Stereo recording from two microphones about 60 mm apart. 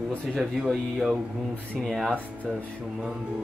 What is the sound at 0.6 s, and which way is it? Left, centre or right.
Speech, centre.